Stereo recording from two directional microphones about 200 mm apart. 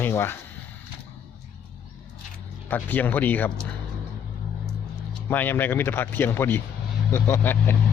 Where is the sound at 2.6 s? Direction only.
10° left (ahead or behind).